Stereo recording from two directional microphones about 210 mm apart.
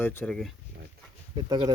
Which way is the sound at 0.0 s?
5° left (ahead or behind).